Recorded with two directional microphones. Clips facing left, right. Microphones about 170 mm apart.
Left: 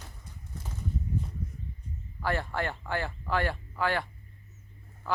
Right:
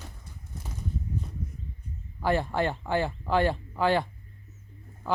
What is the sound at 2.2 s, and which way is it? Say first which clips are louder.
Speech: right 5 dB; 20° right (ahead or behind).